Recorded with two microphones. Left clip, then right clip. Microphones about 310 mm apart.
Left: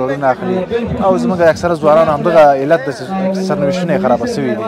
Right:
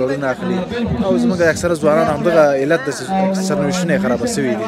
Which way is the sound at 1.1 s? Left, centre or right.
Centre.